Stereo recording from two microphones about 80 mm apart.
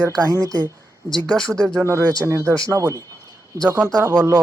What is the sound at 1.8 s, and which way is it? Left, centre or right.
A woman's voice, right.